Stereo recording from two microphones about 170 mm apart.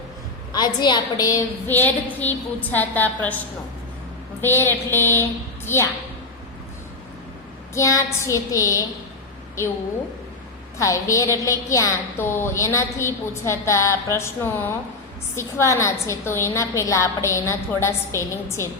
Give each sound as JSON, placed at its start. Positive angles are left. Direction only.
{"t": 0.5, "sound": "a woman's voice", "side_deg": 25}
{"t": 4.4, "sound": "a woman's voice", "side_deg": 15}
{"t": 7.7, "sound": "a woman's voice", "side_deg": 20}
{"t": 10.8, "sound": "a woman's voice", "side_deg": 20}